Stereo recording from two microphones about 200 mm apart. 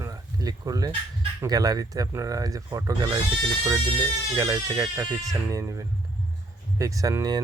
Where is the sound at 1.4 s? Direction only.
20° right (ahead or behind).